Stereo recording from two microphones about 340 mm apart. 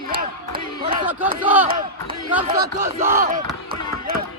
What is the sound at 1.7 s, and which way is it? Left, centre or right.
Speech, centre.